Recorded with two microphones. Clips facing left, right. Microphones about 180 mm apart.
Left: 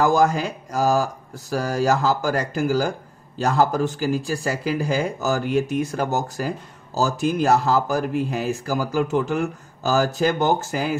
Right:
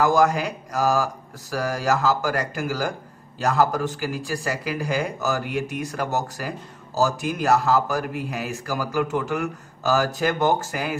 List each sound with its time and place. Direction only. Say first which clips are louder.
0.0 s a man's voice: left 1 dB; 30° left (ahead or behind)